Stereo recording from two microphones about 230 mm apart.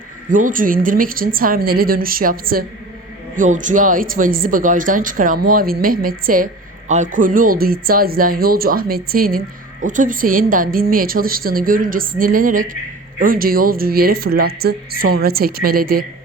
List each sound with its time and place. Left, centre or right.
0.3 s speech: right